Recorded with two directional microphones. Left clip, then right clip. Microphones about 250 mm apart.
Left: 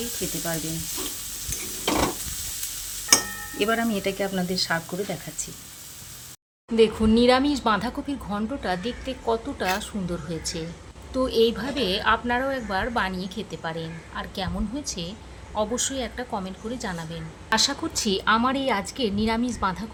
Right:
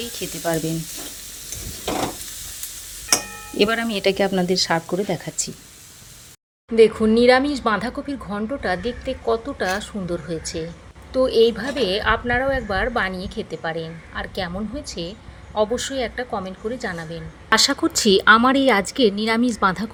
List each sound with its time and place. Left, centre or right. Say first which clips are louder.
0.2 s speech: right 1 dB; right
3.6 s speech: right 5 dB; right
6.7 s a woman's voice: right 5 dB; centre
17.5 s a woman's voice: right 6 dB; right